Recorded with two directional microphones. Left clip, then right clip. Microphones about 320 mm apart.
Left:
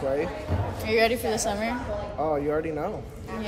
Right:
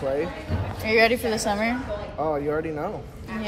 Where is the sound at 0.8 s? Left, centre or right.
Right.